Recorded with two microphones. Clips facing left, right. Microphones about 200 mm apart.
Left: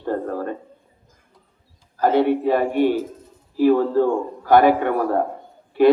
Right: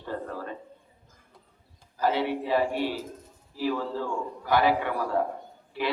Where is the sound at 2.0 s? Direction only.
50° left (ahead or behind).